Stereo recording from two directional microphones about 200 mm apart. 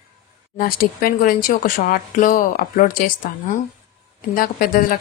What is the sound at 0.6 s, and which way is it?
Speech, 45° left (ahead or behind).